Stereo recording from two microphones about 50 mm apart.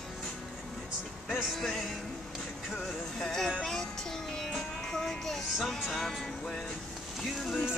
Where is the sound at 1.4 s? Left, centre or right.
Centre.